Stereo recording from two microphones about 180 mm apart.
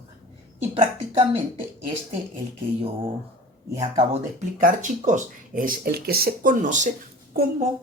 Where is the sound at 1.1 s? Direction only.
30° right (ahead or behind).